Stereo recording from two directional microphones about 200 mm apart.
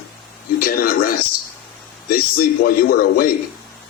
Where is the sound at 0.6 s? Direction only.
45° left (ahead or behind).